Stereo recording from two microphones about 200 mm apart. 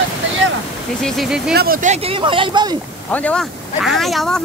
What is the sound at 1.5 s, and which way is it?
Speech, 50° right (ahead or behind).